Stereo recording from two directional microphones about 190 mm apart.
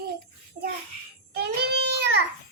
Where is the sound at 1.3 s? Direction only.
60° right (ahead or behind).